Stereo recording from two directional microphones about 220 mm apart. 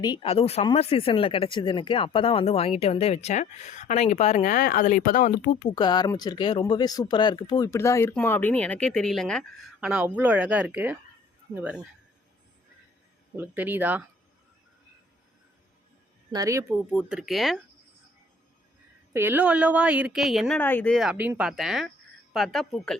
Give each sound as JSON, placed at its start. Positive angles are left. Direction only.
{"t": 0.0, "sound": "speech", "side_deg": 20}
{"t": 5.7, "sound": "speech", "side_deg": 20}
{"t": 13.3, "sound": "speech", "side_deg": -10}
{"t": 16.3, "sound": "speech", "side_deg": -15}
{"t": 16.9, "sound": "speech", "side_deg": 0}
{"t": 19.1, "sound": "speech", "side_deg": -10}